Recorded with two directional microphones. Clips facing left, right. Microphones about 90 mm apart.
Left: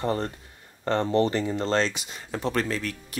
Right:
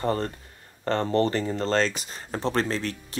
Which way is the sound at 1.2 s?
40° right (ahead or behind).